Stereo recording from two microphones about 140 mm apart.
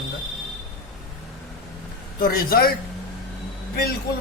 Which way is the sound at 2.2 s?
90° left.